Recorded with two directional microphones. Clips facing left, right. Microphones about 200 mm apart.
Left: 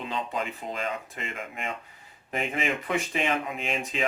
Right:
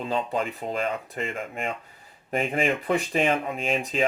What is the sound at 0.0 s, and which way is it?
Speech, 35° right (ahead or behind).